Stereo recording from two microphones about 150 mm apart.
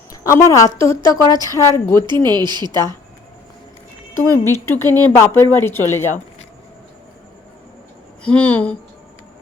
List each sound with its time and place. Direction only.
0.1 s a sound: 20° left (ahead or behind)
0.8 s a woman's voice: 35° right (ahead or behind)
1.5 s a woman's voice: 20° left (ahead or behind)
2.0 s a woman's voice: 30° right (ahead or behind)
4.1 s speech: 15° left (ahead or behind)
8.2 s speech: 10° left (ahead or behind)